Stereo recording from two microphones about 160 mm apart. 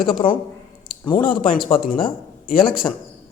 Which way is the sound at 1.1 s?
60° left (ahead or behind).